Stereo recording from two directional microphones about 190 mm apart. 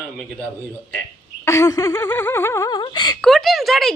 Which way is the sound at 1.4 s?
15° left (ahead or behind).